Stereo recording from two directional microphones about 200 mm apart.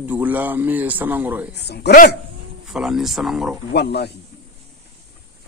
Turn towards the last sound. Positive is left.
turn(degrees=55)  # may be behind; listen again after turning